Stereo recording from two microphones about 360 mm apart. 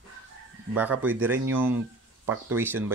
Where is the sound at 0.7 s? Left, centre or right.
Centre.